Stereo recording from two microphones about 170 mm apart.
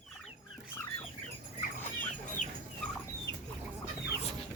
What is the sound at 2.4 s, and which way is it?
Fowl, 45° left (ahead or behind).